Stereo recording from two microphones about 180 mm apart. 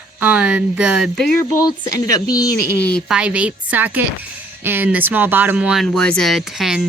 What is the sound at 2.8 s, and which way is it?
Speech, 5° left (ahead or behind).